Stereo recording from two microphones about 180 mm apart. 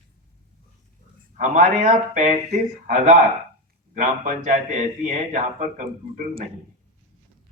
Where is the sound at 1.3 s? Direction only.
50° right (ahead or behind).